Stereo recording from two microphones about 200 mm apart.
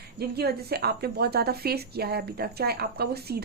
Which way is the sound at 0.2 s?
50° right (ahead or behind).